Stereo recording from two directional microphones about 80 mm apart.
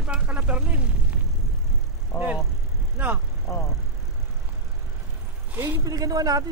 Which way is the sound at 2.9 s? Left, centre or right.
Right.